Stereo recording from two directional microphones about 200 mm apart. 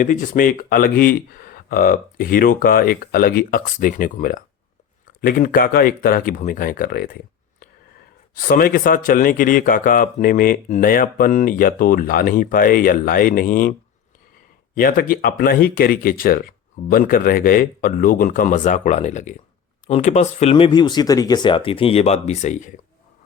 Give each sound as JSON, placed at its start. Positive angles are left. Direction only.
{"t": 0.0, "sound": "speech", "side_deg": 40}
{"t": 8.4, "sound": "speech", "side_deg": 45}
{"t": 14.8, "sound": "speech", "side_deg": 45}